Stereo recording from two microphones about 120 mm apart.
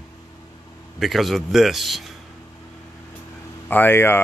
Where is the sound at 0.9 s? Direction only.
Centre (ahead or behind).